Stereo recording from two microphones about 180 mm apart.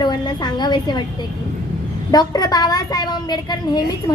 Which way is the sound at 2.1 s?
20° left (ahead or behind).